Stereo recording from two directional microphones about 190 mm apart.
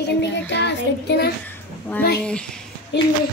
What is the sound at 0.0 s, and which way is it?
Child singing, 65° left (ahead or behind).